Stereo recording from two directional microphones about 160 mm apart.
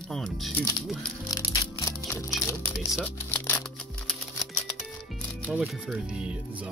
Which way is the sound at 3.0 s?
10° left (ahead or behind).